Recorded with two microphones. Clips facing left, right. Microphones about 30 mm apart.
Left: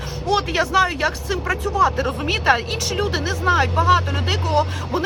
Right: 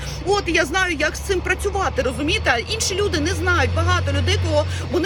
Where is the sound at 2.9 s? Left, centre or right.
Left.